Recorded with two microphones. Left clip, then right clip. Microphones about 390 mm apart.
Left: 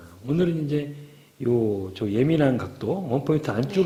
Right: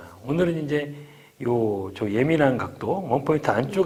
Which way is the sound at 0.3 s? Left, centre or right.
Right.